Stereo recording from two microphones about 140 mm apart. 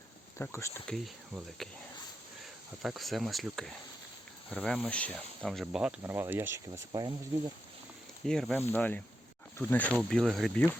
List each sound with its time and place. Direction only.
0.3 s speech: 20° left (ahead or behind)
0.9 s speech: centre (ahead or behind)
2.4 s speech: centre (ahead or behind)
6.0 s speech: 15° right (ahead or behind)
8.2 s speech: 5° left (ahead or behind)